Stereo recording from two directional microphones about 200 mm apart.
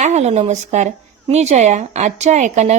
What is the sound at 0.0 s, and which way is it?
A woman's voice, 35° right (ahead or behind).